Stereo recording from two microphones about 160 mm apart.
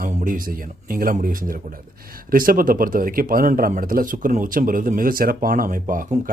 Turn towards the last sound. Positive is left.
turn(degrees=-60)  # may be behind; listen again after turning